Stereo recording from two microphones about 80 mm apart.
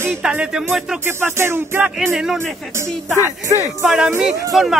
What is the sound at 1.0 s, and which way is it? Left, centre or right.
Music, right.